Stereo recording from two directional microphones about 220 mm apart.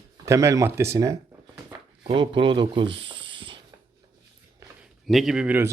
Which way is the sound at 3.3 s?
20° right (ahead or behind).